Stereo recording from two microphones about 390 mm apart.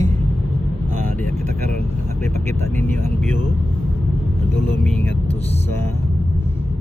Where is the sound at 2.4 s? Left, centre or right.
Centre.